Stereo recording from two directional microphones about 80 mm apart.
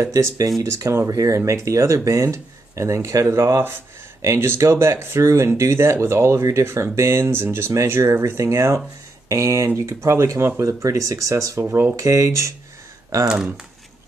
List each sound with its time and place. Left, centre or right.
0.6 s speech: right